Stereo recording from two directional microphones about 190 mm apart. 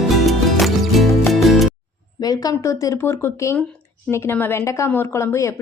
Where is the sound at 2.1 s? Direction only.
20° left (ahead or behind).